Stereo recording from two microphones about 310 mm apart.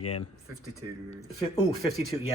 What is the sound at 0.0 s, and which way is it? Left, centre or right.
Speech, left.